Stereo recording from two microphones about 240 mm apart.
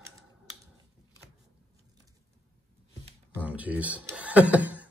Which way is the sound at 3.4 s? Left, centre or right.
Centre.